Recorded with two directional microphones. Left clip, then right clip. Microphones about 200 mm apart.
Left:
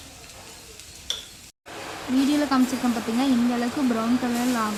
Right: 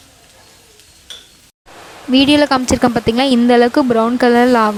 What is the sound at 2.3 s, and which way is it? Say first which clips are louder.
Speech: right 13 dB; 50° right (ahead or behind).